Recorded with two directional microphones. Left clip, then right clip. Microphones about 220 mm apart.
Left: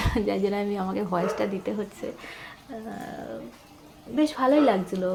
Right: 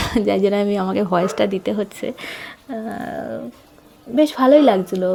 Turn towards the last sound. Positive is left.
turn(degrees=-35)  # may be behind; listen again after turning